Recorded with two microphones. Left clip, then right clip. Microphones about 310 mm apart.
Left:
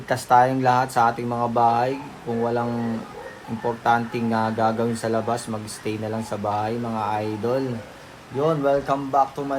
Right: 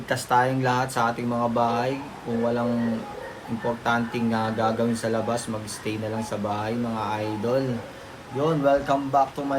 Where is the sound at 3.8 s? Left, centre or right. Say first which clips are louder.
Left 5 dB; left.